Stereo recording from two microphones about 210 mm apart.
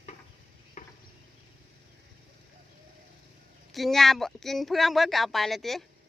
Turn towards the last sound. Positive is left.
turn(degrees=0)  # may be behind; listen again after turning